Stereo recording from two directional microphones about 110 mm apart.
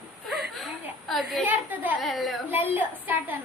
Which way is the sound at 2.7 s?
15° right (ahead or behind).